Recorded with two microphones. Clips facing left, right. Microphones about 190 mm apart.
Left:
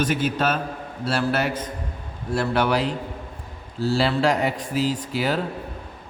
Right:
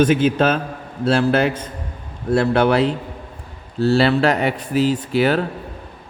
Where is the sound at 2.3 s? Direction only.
65° right (ahead or behind).